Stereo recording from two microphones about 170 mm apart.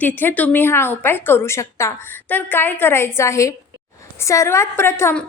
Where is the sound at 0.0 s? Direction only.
10° left (ahead or behind).